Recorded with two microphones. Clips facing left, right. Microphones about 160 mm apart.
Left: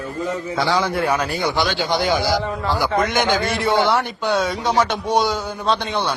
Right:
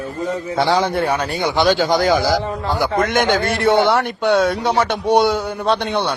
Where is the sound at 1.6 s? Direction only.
45° right (ahead or behind); by 6.2 s 60° right (ahead or behind).